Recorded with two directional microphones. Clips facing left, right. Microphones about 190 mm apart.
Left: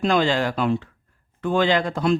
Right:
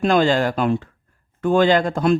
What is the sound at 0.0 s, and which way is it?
Speech, 45° right (ahead or behind).